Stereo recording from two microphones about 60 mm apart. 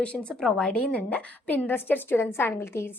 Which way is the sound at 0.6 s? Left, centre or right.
Left.